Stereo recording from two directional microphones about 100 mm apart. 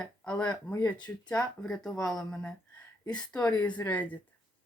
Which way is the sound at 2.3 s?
10° left (ahead or behind).